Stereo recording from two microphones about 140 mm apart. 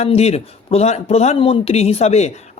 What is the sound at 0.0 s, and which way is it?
A man's voice, 50° left (ahead or behind).